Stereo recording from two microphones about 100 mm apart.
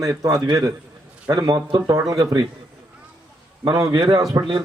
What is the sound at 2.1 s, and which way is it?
Speech, 35° right (ahead or behind).